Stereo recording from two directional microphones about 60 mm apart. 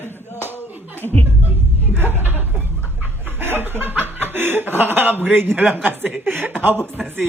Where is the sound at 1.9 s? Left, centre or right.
Right.